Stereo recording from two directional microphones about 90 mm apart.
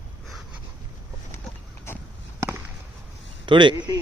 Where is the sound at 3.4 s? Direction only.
65° right (ahead or behind).